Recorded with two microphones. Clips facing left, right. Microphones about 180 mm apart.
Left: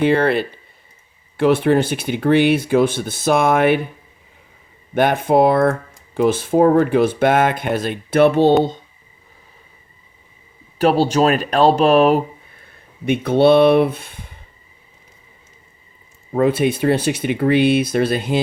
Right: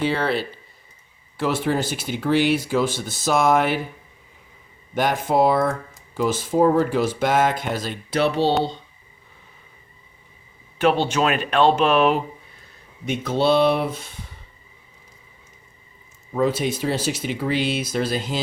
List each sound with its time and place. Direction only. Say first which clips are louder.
0.0 s speech: left 7 dB; 55° left (ahead or behind)
4.9 s speech: left 5 dB; 60° left (ahead or behind)
10.8 s speech: left 5 dB; 35° left (ahead or behind)
13.1 s speech: left 7 dB; 60° left (ahead or behind)
16.3 s speech: left 5 dB; 60° left (ahead or behind)